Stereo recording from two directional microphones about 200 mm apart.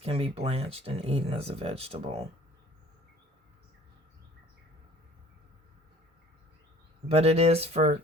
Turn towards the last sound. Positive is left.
turn(degrees=-30)  # may be behind; listen again after turning